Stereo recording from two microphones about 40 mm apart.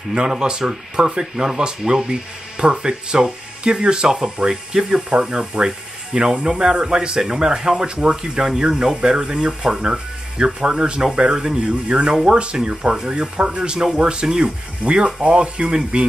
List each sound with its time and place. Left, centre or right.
0.1 s speech: centre